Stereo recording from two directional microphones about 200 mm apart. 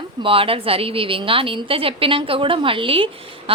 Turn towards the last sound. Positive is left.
turn(degrees=-25)  # may be behind; listen again after turning